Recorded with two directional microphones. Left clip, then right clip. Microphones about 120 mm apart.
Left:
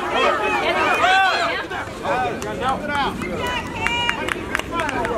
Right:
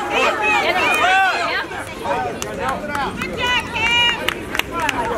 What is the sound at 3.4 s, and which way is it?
Run, 25° right (ahead or behind).